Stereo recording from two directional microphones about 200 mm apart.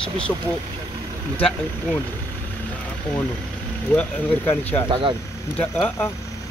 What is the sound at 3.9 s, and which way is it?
Speech, 10° left (ahead or behind).